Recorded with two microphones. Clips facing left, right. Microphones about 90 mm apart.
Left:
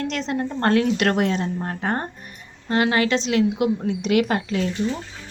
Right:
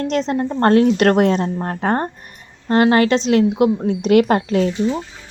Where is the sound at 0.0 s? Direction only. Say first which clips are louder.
Right 6 dB; 35° right (ahead or behind).